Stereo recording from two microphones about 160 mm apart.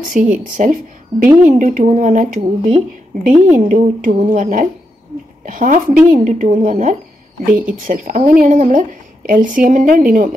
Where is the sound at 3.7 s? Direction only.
55° right (ahead or behind).